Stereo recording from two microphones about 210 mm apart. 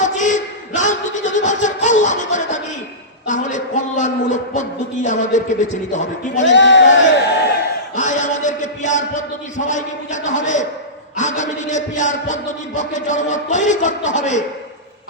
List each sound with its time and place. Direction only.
0.0 s a sound: 35° left (ahead or behind)
5.0 s a man's voice: 35° left (ahead or behind)
6.4 s speech: 60° left (ahead or behind)
7.9 s a man's voice: 35° left (ahead or behind)